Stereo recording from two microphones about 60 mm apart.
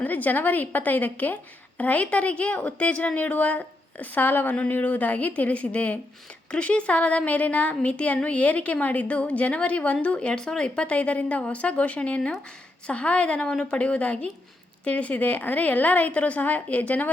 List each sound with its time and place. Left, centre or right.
0.0 s a woman's voice: left